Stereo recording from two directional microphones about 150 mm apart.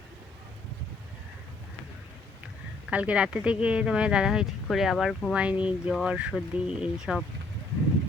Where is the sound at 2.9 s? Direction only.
10° right (ahead or behind).